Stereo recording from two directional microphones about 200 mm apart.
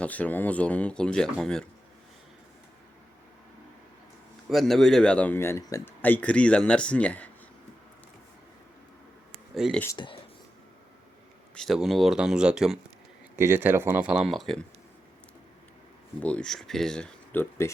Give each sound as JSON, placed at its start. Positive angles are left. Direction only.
{"t": 0.0, "sound": "a man's voice", "side_deg": 5}
{"t": 4.4, "sound": "a man's voice", "side_deg": 0}
{"t": 9.6, "sound": "speech", "side_deg": -5}
{"t": 9.8, "sound": "speech", "side_deg": 20}
{"t": 11.5, "sound": "speech", "side_deg": 0}
{"t": 16.2, "sound": "speech", "side_deg": 5}